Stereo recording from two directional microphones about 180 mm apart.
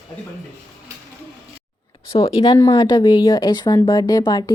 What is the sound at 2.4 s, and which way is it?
A woman's voice, 20° left (ahead or behind).